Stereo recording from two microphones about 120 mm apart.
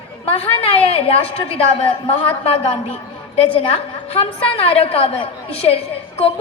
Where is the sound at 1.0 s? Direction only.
55° left (ahead or behind).